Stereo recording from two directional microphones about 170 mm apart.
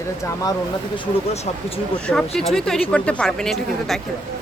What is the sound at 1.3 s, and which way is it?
Speech, 40° left (ahead or behind).